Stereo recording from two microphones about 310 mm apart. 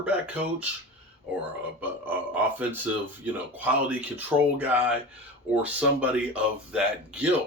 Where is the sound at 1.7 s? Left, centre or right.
Centre.